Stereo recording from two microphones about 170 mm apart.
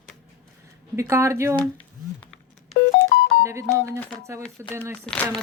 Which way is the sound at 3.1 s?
90° left.